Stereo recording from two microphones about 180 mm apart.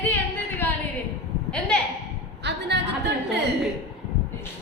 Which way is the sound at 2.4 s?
70° right (ahead or behind).